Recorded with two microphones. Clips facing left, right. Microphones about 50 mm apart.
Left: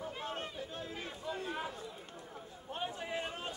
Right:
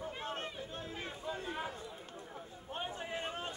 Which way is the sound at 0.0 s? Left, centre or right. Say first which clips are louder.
Even; right.